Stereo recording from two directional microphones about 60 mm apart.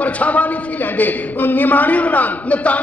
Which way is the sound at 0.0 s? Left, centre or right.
Left.